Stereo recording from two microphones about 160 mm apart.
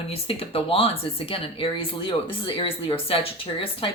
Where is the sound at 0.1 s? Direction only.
35° left (ahead or behind).